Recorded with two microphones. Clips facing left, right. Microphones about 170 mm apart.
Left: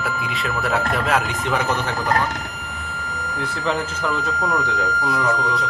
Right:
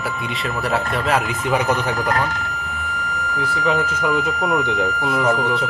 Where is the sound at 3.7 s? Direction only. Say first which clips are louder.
Right 3 dB; 15° right (ahead or behind).